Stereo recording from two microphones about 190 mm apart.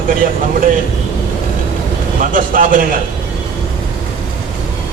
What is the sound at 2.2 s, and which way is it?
Speech, 45° right (ahead or behind).